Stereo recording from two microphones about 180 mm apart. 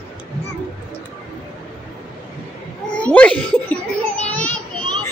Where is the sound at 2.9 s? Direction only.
5° left (ahead or behind).